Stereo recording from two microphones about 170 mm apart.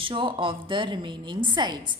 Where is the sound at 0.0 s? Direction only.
30° right (ahead or behind).